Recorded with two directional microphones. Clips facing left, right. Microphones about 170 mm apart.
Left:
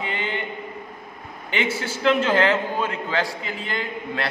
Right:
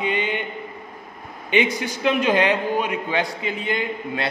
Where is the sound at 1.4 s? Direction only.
15° right (ahead or behind).